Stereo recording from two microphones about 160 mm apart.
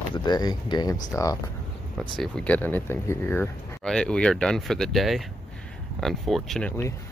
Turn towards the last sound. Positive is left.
turn(degrees=0)  # may be behind; listen again after turning